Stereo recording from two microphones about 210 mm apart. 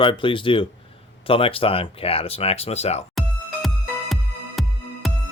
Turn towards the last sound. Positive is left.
turn(degrees=0)  # may be behind; listen again after turning